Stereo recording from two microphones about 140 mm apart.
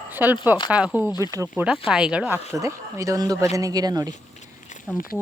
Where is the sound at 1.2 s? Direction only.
25° right (ahead or behind).